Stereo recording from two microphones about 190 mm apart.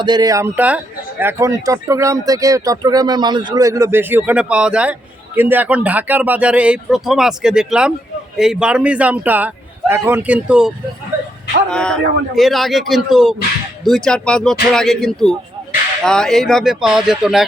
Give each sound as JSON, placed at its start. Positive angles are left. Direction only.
{"t": 0.0, "sound": "speech", "side_deg": -20}
{"t": 11.7, "sound": "a man's voice", "side_deg": 5}